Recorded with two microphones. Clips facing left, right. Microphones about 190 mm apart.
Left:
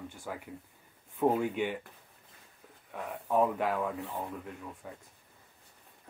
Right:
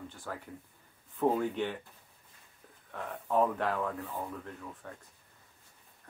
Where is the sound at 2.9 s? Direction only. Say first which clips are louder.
Left 1 dB; 10° left (ahead or behind).